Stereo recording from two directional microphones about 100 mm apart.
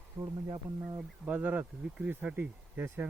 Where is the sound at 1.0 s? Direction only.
15° right (ahead or behind).